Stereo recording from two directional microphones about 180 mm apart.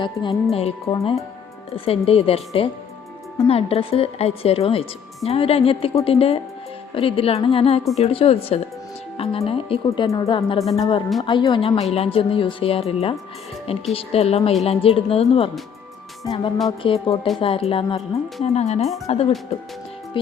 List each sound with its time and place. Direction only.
0.0 s a woman's voice: 25° left (ahead or behind)
16.2 s a woman's voice: 20° left (ahead or behind)